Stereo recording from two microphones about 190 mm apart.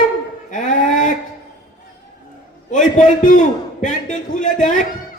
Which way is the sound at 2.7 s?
40° left (ahead or behind).